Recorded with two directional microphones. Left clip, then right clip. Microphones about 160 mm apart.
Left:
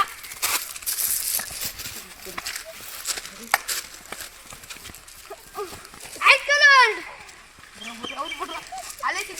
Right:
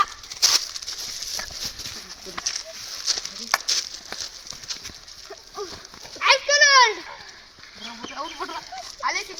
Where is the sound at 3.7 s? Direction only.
Centre (ahead or behind).